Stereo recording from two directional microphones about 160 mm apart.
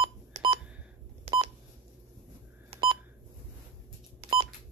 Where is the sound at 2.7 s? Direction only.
30° right (ahead or behind).